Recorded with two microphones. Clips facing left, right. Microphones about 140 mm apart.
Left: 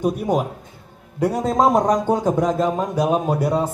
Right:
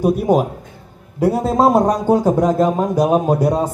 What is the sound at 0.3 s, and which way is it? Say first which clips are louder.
A man's voice: right 5 dB; 10° right (ahead or behind).